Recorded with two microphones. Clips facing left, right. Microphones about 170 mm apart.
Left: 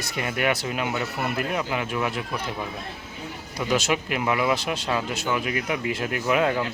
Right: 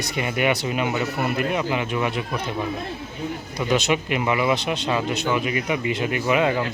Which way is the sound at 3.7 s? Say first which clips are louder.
Right 3 dB; centre (ahead or behind).